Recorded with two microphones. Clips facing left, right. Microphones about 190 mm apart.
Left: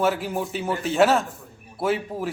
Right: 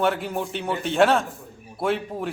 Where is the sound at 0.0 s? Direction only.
Centre (ahead or behind).